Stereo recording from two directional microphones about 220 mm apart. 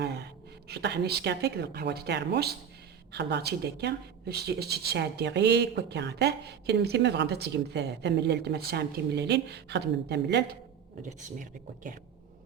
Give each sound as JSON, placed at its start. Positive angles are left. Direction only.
{"t": 0.7, "sound": "speech", "side_deg": -50}
{"t": 11.3, "sound": "speech", "side_deg": -35}